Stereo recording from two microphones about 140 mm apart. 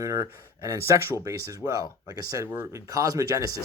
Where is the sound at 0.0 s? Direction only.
25° right (ahead or behind).